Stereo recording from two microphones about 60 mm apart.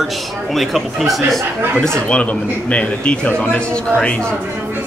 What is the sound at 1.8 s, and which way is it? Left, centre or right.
A man's voice, centre.